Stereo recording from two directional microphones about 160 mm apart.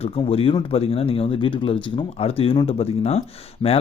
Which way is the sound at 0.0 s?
35° left (ahead or behind).